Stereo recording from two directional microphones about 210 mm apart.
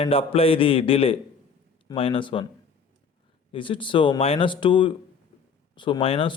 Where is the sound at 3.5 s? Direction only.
25° left (ahead or behind).